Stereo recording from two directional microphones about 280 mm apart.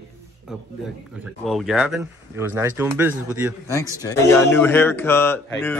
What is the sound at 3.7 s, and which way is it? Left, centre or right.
Speech, centre.